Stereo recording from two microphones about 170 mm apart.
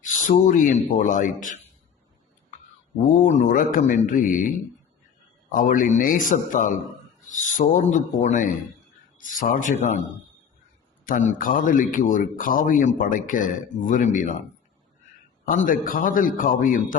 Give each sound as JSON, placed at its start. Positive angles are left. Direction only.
{"t": 0.0, "sound": "speech", "side_deg": 50}
{"t": 3.0, "sound": "speech", "side_deg": 50}
{"t": 15.4, "sound": "speech", "side_deg": 55}